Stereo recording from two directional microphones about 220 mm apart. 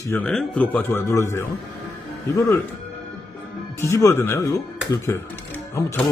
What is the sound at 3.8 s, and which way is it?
Speech, 15° left (ahead or behind).